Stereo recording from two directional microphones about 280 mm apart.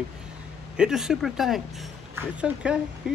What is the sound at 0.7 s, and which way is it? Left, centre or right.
Speech, centre.